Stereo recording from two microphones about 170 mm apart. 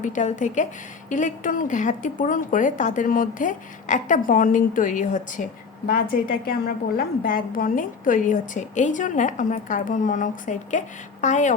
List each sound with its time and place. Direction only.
0.0 s a woman's voice: 45° left (ahead or behind)
5.9 s a woman's voice: 60° left (ahead or behind); by 11.5 s 45° left (ahead or behind)